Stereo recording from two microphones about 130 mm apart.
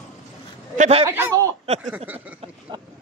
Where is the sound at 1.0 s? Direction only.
20° right (ahead or behind).